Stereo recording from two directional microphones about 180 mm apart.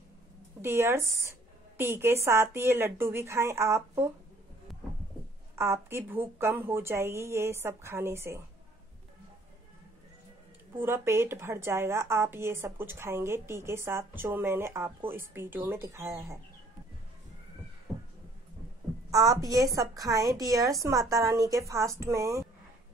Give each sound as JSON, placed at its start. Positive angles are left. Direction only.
{"t": 0.6, "sound": "a woman's voice", "side_deg": -15}
{"t": 5.6, "sound": "a woman's voice", "side_deg": -15}
{"t": 10.8, "sound": "a woman's voice", "side_deg": -15}
{"t": 19.0, "sound": "a woman's voice", "side_deg": -20}